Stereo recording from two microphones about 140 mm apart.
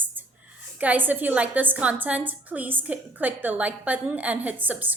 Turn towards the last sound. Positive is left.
turn(degrees=-10)  # may be behind; listen again after turning